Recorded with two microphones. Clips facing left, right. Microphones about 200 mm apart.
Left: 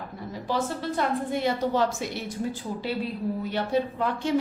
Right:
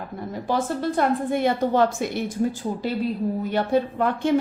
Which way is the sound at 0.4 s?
50° right (ahead or behind).